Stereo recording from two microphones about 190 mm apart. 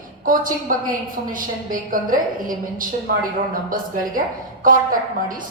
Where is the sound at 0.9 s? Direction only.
45° right (ahead or behind).